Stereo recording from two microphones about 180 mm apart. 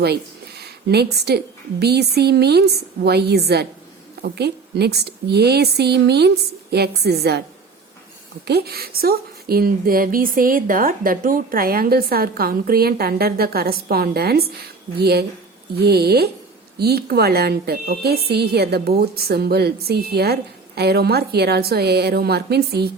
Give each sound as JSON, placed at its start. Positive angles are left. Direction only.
{"t": 0.6, "sound": "a woman's voice", "side_deg": -65}
{"t": 8.4, "sound": "a woman's voice", "side_deg": -60}